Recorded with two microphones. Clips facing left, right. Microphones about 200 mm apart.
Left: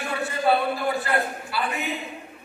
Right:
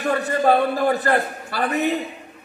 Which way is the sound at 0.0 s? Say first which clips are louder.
Right 6 dB; 40° right (ahead or behind).